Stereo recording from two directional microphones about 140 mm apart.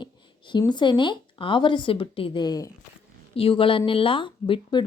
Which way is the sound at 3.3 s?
40° left (ahead or behind).